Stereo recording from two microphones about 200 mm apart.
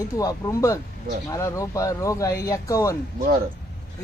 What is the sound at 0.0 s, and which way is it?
Speech, 15° left (ahead or behind).